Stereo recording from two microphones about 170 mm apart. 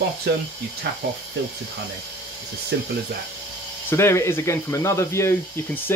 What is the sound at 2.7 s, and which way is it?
Speech, 90° right.